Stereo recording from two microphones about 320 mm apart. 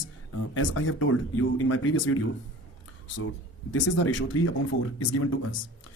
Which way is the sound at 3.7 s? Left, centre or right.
Left.